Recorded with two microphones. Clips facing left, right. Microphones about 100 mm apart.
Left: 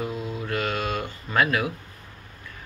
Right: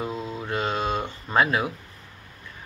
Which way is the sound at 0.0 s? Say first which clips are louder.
Even; 25° right (ahead or behind).